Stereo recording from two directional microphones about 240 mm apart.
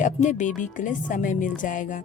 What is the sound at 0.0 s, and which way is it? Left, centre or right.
Speech, left.